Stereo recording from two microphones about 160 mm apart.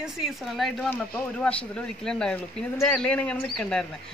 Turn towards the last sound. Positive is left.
turn(degrees=5)  # may be behind; listen again after turning